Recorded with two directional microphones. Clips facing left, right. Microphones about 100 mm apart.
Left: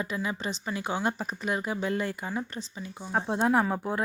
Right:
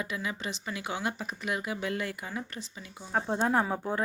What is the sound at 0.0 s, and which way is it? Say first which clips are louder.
Speech: left 3 dB; 35° left (ahead or behind).